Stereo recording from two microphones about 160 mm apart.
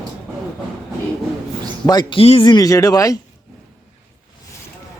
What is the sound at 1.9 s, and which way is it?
Speech, 30° left (ahead or behind).